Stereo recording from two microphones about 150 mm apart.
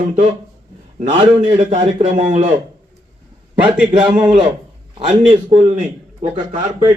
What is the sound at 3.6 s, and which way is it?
Speech, 10° right (ahead or behind).